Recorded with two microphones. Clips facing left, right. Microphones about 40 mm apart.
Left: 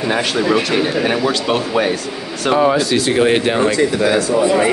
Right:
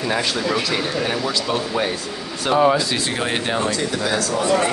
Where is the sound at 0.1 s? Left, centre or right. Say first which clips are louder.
Left 6 dB; left.